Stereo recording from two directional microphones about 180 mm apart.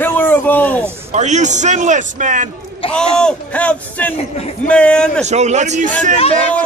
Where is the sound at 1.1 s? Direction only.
40° right (ahead or behind).